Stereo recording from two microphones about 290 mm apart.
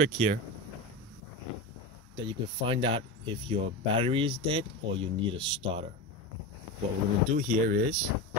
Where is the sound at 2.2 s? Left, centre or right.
Centre.